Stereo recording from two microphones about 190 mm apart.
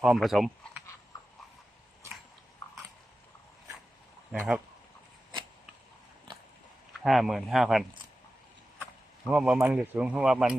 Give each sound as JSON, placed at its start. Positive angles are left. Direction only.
{"t": 0.0, "sound": "speech", "side_deg": 0}
{"t": 4.3, "sound": "speech", "side_deg": 0}
{"t": 7.0, "sound": "speech", "side_deg": 0}
{"t": 8.8, "sound": "a sound", "side_deg": 0}
{"t": 9.6, "sound": "speech", "side_deg": -10}